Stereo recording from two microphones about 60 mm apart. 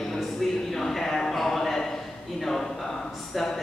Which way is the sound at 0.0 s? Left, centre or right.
Centre.